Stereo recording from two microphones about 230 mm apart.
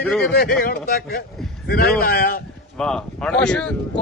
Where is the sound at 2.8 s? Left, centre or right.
Centre.